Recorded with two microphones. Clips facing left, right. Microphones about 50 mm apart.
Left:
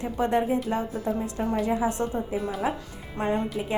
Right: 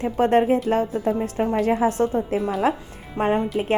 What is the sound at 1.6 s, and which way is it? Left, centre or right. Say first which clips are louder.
Speech: right 6 dB; right.